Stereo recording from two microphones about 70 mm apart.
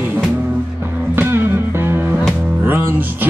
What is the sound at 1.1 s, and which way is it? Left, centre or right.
Music, right.